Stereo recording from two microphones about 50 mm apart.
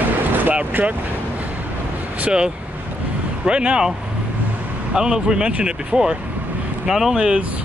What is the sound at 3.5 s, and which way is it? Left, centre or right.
Speech, centre.